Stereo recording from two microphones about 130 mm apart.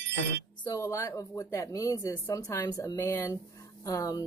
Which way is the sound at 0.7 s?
25° left (ahead or behind).